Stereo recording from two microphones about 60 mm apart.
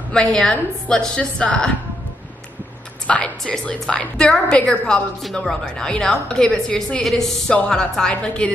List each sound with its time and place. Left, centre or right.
0.1 s a woman's voice: centre
3.1 s a woman's voice: centre